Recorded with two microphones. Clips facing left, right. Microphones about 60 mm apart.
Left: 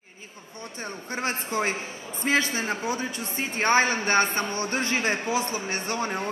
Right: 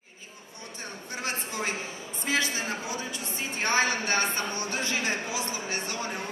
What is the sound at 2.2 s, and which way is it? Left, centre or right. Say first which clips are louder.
A woman's voice: left 4 dB; left.